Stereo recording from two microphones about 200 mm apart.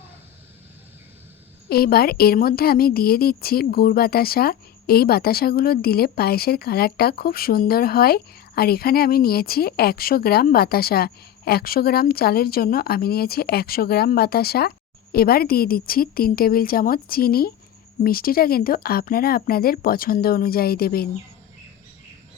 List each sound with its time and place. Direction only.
1.7 s a woman's voice: 50° left (ahead or behind)